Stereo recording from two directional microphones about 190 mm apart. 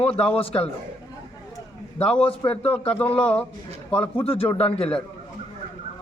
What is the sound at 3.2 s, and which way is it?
A man's voice, 5° left (ahead or behind).